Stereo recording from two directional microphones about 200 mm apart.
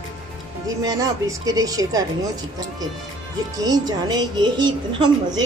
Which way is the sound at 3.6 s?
20° right (ahead or behind).